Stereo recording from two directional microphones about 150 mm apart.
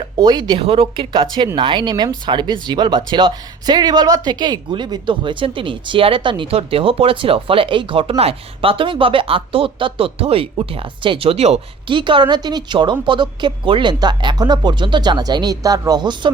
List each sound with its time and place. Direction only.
0.2 s speech: 30° right (ahead or behind)